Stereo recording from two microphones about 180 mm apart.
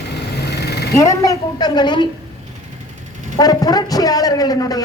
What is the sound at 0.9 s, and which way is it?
A man's voice, 20° left (ahead or behind).